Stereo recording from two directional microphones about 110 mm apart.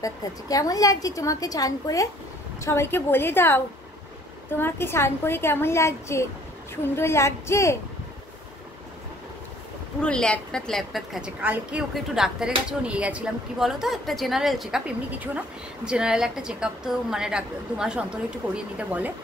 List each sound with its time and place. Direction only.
0.0 s a woman's voice: 35° left (ahead or behind)
10.0 s a woman's voice: 10° left (ahead or behind); by 19.1 s 15° right (ahead or behind)